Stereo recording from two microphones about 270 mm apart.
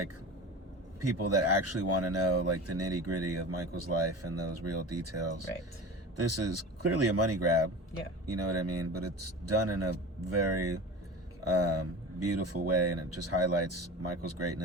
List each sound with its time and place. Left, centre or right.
1.2 s speech: right